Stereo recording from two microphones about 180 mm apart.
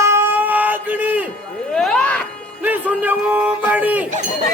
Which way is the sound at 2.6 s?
10° right (ahead or behind).